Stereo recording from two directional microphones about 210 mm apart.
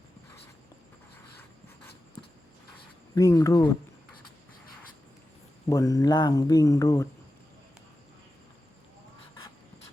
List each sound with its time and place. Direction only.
3.2 s speech: 15° left (ahead or behind)
5.6 s speech: 15° left (ahead or behind)